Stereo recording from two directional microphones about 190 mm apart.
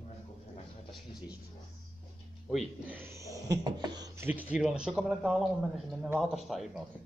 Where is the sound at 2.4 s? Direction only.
5° right (ahead or behind).